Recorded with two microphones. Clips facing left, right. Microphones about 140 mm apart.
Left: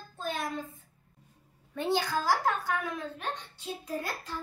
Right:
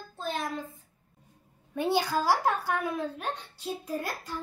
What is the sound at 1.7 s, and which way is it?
A woman's voice, 10° right (ahead or behind).